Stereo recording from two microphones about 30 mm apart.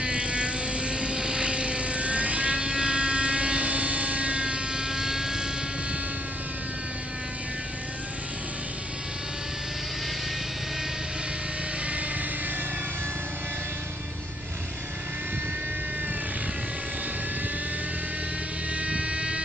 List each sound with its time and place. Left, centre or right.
0.0 s vehicle: right
4.8 s vehicle: right
18.8 s vehicle: right